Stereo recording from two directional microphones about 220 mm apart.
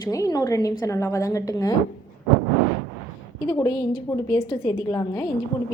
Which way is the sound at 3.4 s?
15° left (ahead or behind).